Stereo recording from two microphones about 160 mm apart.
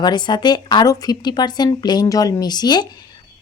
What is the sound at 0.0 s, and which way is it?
Speech, 30° left (ahead or behind).